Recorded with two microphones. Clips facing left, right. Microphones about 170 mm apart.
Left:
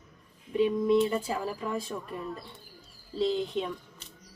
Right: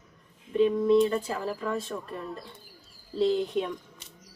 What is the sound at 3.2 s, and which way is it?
Speech, centre (ahead or behind).